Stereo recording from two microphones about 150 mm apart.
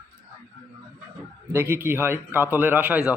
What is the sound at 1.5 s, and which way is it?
Speech, 15° right (ahead or behind).